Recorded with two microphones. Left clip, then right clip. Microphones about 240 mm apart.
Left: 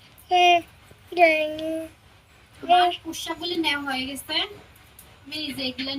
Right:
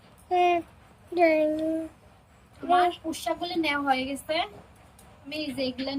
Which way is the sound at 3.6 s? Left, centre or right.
Centre.